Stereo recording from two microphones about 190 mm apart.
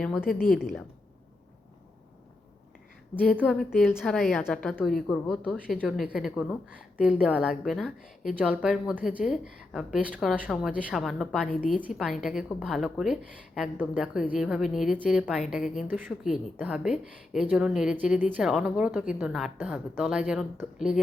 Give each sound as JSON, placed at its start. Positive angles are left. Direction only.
{"t": 0.0, "sound": "a woman's voice", "side_deg": 0}
{"t": 0.3, "sound": "a woman's voice", "side_deg": 50}
{"t": 0.6, "sound": "a woman's voice", "side_deg": 0}
{"t": 3.2, "sound": "a woman's voice", "side_deg": 0}